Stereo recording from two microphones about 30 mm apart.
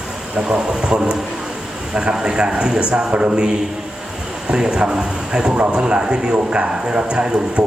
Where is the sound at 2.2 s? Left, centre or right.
Right.